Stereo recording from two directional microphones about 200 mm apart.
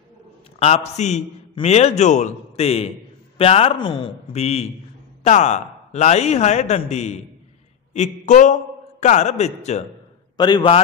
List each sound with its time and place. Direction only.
0.6 s a man's voice: 30° left (ahead or behind)
10.3 s a man's voice: 20° left (ahead or behind)